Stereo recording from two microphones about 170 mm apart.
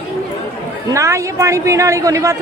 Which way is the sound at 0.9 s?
20° right (ahead or behind).